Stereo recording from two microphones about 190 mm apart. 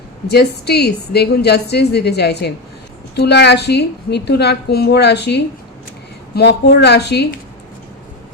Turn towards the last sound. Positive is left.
turn(degrees=60)  # may be behind; listen again after turning